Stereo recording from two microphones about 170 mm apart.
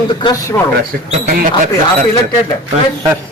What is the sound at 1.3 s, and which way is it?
Speech, 60° right (ahead or behind).